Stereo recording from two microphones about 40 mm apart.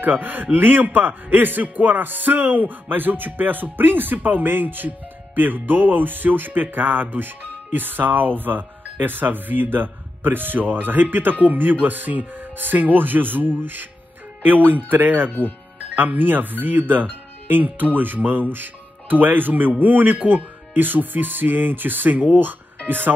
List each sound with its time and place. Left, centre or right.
0.0 s a man's voice: right